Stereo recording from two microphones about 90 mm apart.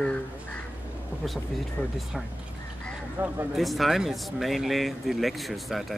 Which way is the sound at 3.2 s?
25° right (ahead or behind).